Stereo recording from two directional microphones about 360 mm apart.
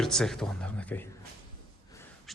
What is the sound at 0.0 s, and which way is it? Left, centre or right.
Speech, centre.